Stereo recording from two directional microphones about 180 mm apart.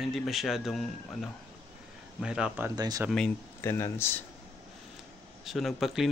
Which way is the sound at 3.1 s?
10° left (ahead or behind).